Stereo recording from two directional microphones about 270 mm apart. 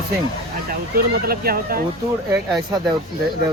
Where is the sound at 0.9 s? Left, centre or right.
Right.